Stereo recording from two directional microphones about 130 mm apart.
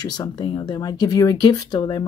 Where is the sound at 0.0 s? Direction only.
30° left (ahead or behind).